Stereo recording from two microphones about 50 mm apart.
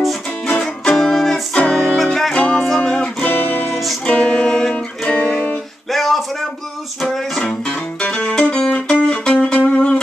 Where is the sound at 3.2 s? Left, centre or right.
Left.